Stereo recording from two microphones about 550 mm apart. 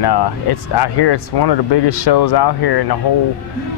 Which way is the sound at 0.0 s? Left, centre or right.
Left.